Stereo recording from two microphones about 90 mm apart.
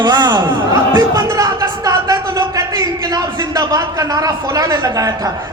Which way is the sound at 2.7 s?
45° right (ahead or behind).